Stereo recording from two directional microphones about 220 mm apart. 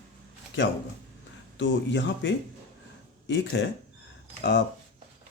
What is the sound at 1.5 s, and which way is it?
Speech, 55° left (ahead or behind).